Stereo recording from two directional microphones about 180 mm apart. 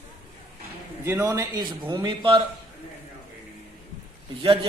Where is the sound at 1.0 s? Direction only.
15° right (ahead or behind).